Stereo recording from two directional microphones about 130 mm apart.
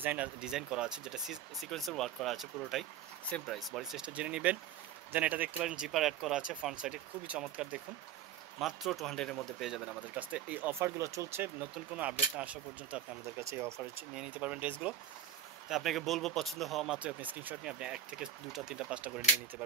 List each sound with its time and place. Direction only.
0.0 s speech: 10° right (ahead or behind)
9.9 s speech: 10° right (ahead or behind)
13.4 s speech: 20° right (ahead or behind)
14.1 s speech: 10° right (ahead or behind)
15.7 s speech: centre (ahead or behind)